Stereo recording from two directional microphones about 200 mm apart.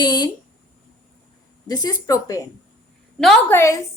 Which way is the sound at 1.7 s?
20° left (ahead or behind).